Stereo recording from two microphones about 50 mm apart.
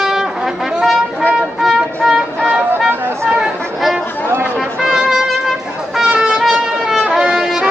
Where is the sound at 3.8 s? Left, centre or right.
Centre.